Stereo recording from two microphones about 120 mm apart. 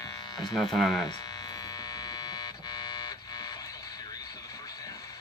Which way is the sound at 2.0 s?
35° left (ahead or behind).